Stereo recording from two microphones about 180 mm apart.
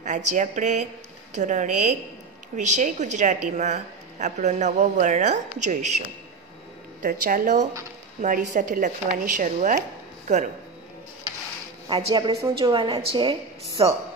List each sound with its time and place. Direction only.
0.0 s a woman's voice: 45° right (ahead or behind)
7.0 s speech: 50° right (ahead or behind)
11.9 s a woman's voice: 30° right (ahead or behind)